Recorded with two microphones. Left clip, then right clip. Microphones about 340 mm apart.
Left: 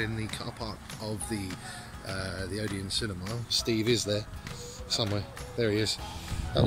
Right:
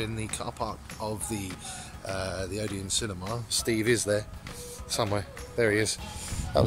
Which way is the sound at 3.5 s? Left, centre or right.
Right.